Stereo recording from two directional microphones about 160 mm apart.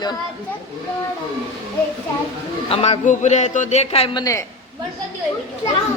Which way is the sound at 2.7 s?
40° left (ahead or behind).